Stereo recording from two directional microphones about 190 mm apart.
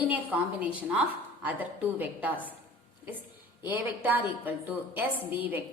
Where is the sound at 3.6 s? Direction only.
10° right (ahead or behind).